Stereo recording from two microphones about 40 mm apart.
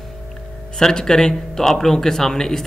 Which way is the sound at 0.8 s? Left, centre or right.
Centre.